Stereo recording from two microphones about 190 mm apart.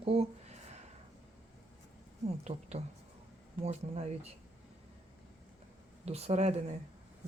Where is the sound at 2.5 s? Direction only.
30° right (ahead or behind).